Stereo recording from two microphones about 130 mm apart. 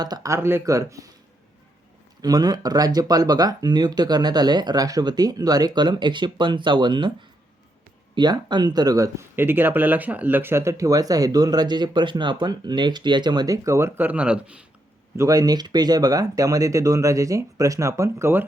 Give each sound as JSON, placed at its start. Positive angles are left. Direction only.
{"t": 0.0, "sound": "speech", "side_deg": -30}
{"t": 2.2, "sound": "speech", "side_deg": -30}
{"t": 8.1, "sound": "speech", "side_deg": -35}
{"t": 15.1, "sound": "speech", "side_deg": -25}